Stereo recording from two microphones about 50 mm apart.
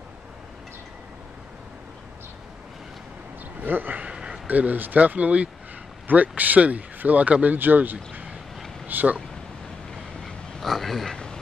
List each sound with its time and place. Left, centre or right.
3.6 s speech: right
4.1 s a sound: centre
4.5 s speech: right
7.5 s speech: right
10.2 s dog: centre